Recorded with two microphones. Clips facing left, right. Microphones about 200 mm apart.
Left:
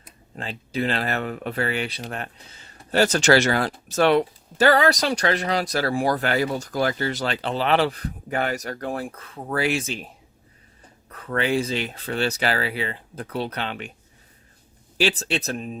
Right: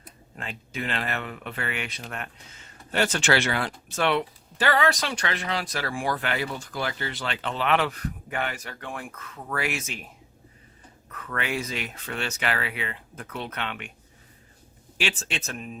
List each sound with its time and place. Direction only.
0.3 s speech: 35° left (ahead or behind)
11.1 s speech: 35° left (ahead or behind)
14.9 s speech: 35° left (ahead or behind)